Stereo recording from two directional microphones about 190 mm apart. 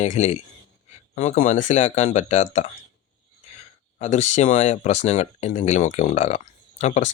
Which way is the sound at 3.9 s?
40° left (ahead or behind).